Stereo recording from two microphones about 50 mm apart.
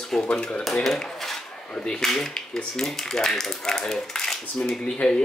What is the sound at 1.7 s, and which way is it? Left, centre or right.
Speech, centre.